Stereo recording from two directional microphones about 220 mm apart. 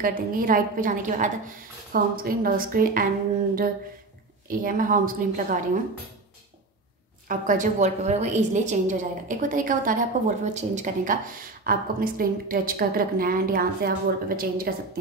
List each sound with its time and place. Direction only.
0.0 s a woman's voice: 40° right (ahead or behind)
4.5 s a woman's voice: 40° right (ahead or behind)
7.2 s a woman's voice: 35° right (ahead or behind)